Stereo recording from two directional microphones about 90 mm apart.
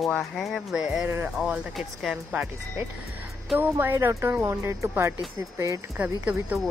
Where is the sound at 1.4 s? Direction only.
5° right (ahead or behind).